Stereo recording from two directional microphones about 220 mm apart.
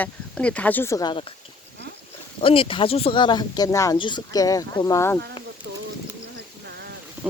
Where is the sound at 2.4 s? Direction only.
25° left (ahead or behind).